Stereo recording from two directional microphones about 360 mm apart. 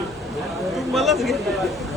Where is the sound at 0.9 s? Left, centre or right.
Centre.